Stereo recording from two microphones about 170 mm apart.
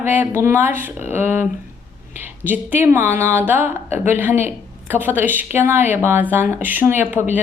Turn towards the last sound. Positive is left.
turn(degrees=-10)  # may be behind; listen again after turning